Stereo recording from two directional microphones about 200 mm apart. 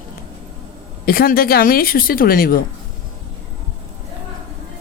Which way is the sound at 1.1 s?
50° left (ahead or behind).